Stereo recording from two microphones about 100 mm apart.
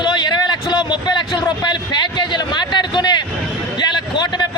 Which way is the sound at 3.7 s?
45° left (ahead or behind).